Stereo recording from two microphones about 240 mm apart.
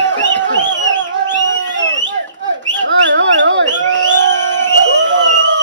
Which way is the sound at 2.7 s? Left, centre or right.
Right.